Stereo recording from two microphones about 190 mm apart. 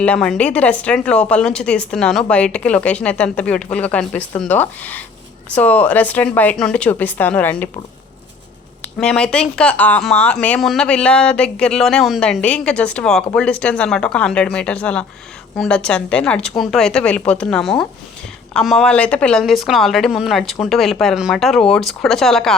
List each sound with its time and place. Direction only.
0.0 s speech: 5° left (ahead or behind)
9.0 s speech: 5° left (ahead or behind)